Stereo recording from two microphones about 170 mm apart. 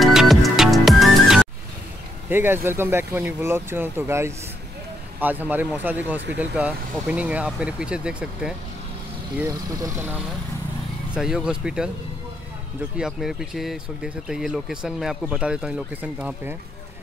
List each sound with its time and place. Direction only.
0.0 s music: centre (ahead or behind)
2.2 s speech: 10° right (ahead or behind)
9.4 s speech: 20° right (ahead or behind); by 11.9 s 5° right (ahead or behind)
12.9 s speech: 5° right (ahead or behind)